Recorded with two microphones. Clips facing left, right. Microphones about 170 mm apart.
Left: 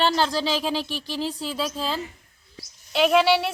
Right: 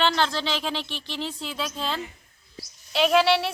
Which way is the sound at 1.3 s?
35° left (ahead or behind).